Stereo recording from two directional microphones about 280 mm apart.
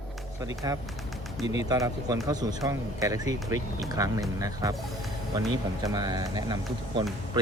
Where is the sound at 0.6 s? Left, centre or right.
Centre.